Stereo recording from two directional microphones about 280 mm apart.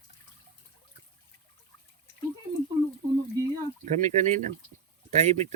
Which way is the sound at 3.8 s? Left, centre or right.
Right.